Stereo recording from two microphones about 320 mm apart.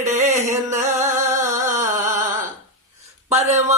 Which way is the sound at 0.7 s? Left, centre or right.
Right.